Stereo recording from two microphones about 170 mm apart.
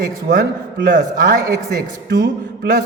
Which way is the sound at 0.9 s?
50° right (ahead or behind).